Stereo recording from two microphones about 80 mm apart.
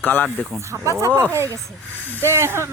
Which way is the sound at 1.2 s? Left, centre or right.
Right.